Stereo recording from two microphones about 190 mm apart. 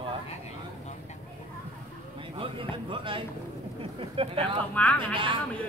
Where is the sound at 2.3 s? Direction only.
30° right (ahead or behind).